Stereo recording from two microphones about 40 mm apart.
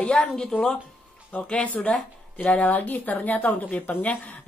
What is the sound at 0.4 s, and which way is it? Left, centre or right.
Speech, left.